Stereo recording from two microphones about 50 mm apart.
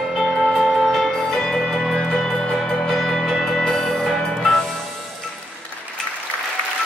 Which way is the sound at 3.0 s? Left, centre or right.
Centre.